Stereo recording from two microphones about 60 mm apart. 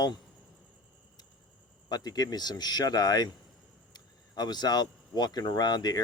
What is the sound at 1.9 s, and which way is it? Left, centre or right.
Speech, left.